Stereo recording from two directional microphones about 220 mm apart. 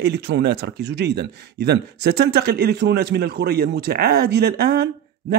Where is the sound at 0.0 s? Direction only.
50° right (ahead or behind).